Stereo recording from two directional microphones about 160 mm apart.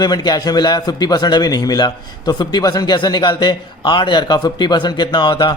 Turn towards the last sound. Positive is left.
turn(degrees=30)  # may be behind; listen again after turning